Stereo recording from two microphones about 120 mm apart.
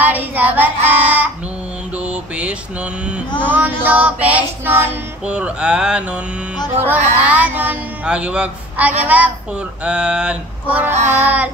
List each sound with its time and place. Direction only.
0.0 s child singing: 15° right (ahead or behind)
2.0 s mantra: 10° right (ahead or behind)
3.4 s speech: 15° right (ahead or behind)